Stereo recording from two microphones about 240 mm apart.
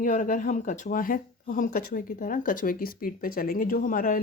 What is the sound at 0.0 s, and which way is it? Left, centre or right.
Speech, left.